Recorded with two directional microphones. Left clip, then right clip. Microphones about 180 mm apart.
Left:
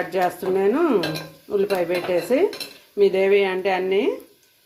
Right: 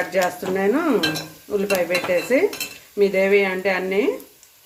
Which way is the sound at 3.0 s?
15° left (ahead or behind).